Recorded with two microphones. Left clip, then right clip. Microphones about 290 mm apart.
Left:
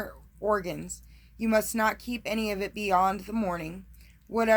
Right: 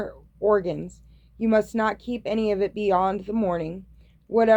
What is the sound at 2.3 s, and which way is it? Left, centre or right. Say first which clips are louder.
Speech: right 8 dB; centre.